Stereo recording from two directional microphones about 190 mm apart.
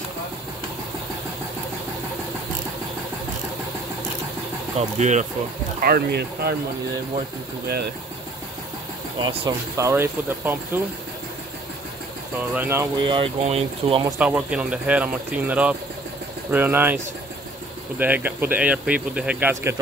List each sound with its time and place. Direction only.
4.7 s speech: 35° right (ahead or behind)
5.8 s speech: 50° right (ahead or behind)
9.2 s speech: 20° right (ahead or behind)
12.5 s speech: 10° right (ahead or behind)
13.0 s speech: 30° right (ahead or behind)
14.1 s speech: 5° right (ahead or behind)